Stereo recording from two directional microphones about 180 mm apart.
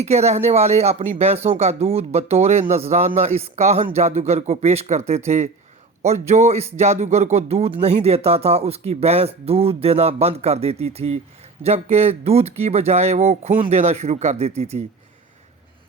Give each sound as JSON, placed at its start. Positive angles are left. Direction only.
{"t": 0.0, "sound": "speech", "side_deg": -35}